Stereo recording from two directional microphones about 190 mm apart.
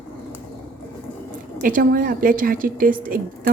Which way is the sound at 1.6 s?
45° right (ahead or behind).